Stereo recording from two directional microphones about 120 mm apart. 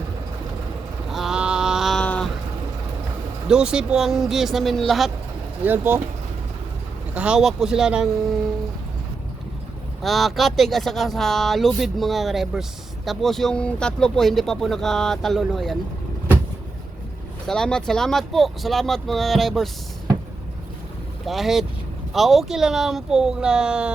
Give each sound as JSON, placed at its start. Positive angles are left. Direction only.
{"t": 1.1, "sound": "mantra", "side_deg": -5}
{"t": 2.0, "sound": "a sound", "side_deg": 10}
{"t": 3.4, "sound": "speech", "side_deg": -5}
{"t": 5.6, "sound": "speech", "side_deg": -15}
{"t": 7.1, "sound": "speech", "side_deg": -10}
{"t": 10.0, "sound": "speech", "side_deg": 0}
{"t": 17.4, "sound": "speech", "side_deg": 5}
{"t": 21.2, "sound": "speech", "side_deg": 0}